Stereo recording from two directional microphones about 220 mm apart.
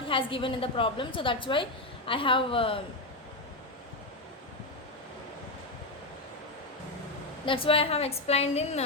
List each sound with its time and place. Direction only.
0.0 s a woman's voice: 25° left (ahead or behind)
7.4 s a woman's voice: 25° left (ahead or behind)